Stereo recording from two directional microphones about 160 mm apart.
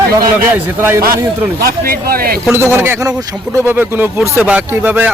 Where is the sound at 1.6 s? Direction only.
70° right (ahead or behind).